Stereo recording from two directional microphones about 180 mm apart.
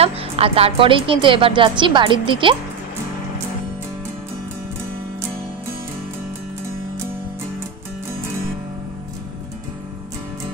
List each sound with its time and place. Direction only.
0.0 s a woman's voice: 30° right (ahead or behind)